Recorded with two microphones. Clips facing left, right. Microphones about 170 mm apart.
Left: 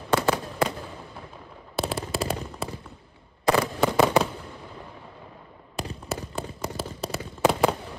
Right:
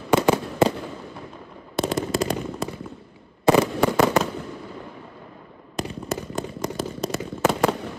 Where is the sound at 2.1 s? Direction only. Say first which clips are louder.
Right 5 dB; 5° left (ahead or behind).